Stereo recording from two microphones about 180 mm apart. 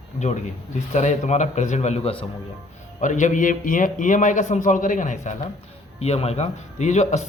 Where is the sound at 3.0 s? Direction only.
45° left (ahead or behind).